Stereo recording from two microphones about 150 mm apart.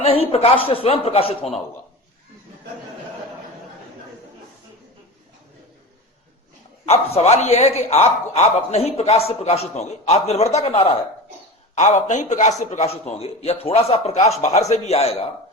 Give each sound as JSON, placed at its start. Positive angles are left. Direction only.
{"t": 0.0, "sound": "speech", "side_deg": 40}
{"t": 6.8, "sound": "a man's voice", "side_deg": 45}